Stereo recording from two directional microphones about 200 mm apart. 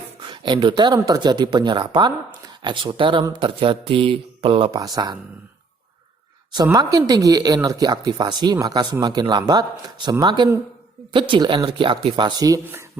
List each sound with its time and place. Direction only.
0.3 s speech: 25° right (ahead or behind)
6.5 s speech: 20° right (ahead or behind)